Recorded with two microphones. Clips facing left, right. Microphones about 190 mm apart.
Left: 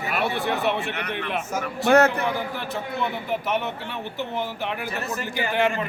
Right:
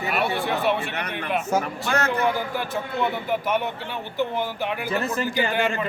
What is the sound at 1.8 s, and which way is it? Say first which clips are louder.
Speech: left 7 dB; 60° left (ahead or behind).